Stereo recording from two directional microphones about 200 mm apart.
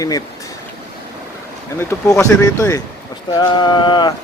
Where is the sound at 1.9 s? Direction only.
15° left (ahead or behind).